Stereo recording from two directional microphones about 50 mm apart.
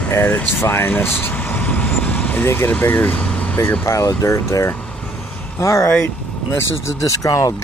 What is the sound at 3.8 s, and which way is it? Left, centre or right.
Speech, left.